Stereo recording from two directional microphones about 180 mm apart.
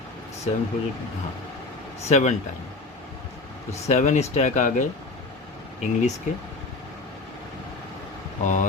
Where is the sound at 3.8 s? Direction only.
40° left (ahead or behind).